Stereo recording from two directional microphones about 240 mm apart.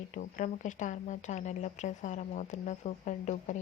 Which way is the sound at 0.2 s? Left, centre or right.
Left.